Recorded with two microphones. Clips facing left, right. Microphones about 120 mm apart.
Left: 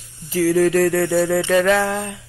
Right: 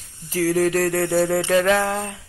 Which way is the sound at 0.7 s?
25° right (ahead or behind).